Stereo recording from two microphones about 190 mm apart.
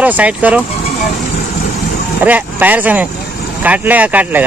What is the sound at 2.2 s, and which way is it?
Speech, 10° right (ahead or behind).